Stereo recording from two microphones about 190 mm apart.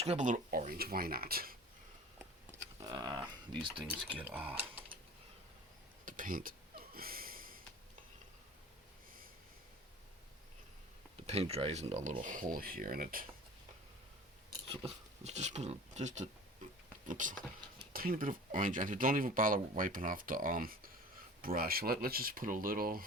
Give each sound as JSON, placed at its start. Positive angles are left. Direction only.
{"t": 0.0, "sound": "speech", "side_deg": -40}
{"t": 2.5, "sound": "a sound", "side_deg": -20}
{"t": 4.0, "sound": "speech", "side_deg": -10}
{"t": 6.1, "sound": "speech", "side_deg": -45}
{"t": 6.9, "sound": "a sound", "side_deg": -50}
{"t": 11.2, "sound": "speech", "side_deg": -35}
{"t": 14.7, "sound": "speech", "side_deg": -35}